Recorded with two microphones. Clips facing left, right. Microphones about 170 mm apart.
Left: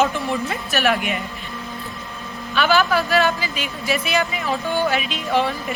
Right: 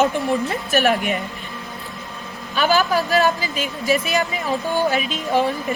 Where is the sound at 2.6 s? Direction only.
40° right (ahead or behind).